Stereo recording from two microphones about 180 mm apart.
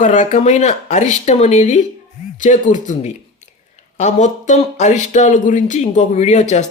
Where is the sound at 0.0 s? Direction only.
40° left (ahead or behind).